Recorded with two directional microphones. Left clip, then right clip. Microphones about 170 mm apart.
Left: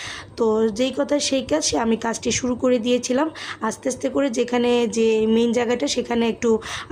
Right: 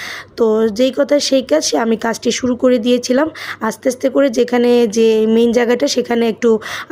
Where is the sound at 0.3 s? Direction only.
25° right (ahead or behind).